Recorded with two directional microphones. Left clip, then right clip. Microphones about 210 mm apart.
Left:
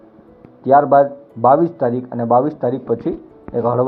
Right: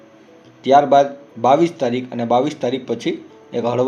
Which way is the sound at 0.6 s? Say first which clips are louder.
Left 1 dB; 5° right (ahead or behind).